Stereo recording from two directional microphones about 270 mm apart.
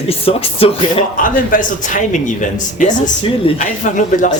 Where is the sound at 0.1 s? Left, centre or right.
Left.